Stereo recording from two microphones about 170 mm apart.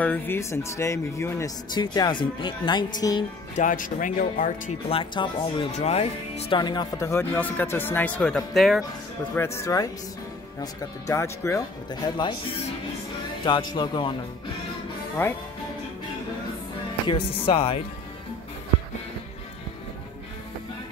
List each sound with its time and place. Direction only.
0.0 s speech: 10° left (ahead or behind)
1.7 s speech: 25° left (ahead or behind)
3.5 s speech: 50° left (ahead or behind)
4.8 s speech: 30° left (ahead or behind)
6.6 s speech: 25° left (ahead or behind); by 8.8 s centre (ahead or behind)
9.3 s speech: 15° left (ahead or behind)
13.5 s speech: 25° left (ahead or behind)
15.2 s speech: 10° left (ahead or behind)
17.1 s speech: 30° left (ahead or behind)